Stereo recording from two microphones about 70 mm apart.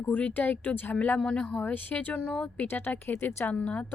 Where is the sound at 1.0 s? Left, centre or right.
Centre.